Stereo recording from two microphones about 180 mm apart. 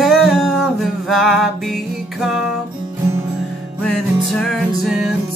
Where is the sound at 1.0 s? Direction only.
Centre (ahead or behind).